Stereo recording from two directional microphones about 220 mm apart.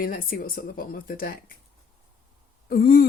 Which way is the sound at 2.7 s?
40° left (ahead or behind).